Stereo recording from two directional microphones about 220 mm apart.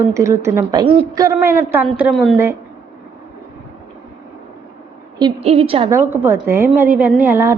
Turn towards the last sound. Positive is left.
turn(degrees=-10)  # may be behind; listen again after turning